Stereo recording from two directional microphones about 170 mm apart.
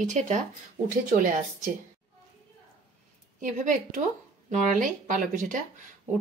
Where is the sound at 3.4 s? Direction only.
50° right (ahead or behind).